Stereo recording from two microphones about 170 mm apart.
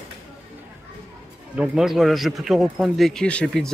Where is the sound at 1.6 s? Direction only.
Centre (ahead or behind).